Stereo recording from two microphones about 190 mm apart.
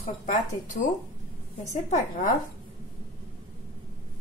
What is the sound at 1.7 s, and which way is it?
Speech, 40° left (ahead or behind).